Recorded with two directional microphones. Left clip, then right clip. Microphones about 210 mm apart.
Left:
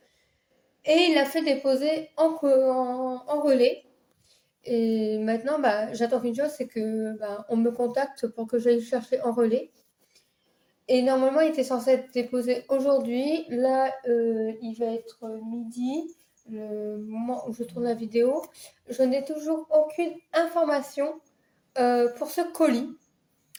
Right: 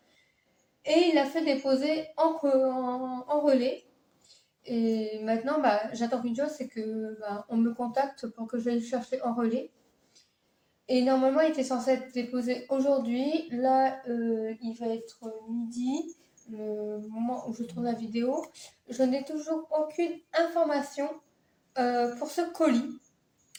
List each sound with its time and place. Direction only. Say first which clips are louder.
0.8 s a woman's voice: left 3 dB; 50° left (ahead or behind)
10.8 s a woman's voice: left 3 dB; 50° left (ahead or behind)
17.1 s a woman's voice: left 2 dB; 45° left (ahead or behind)